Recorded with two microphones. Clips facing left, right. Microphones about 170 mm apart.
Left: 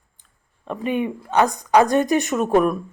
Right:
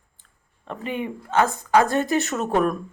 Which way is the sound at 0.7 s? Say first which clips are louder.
Left 5 dB; 15° left (ahead or behind).